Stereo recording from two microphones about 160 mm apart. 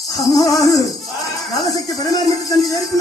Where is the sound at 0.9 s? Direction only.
Centre (ahead or behind).